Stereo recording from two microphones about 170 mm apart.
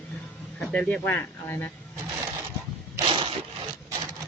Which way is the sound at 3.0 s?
30° right (ahead or behind).